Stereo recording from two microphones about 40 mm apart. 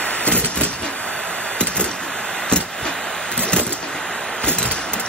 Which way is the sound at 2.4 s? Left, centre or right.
Left.